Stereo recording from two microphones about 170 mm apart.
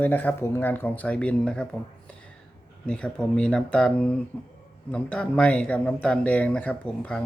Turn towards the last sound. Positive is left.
turn(degrees=10)  # may be behind; listen again after turning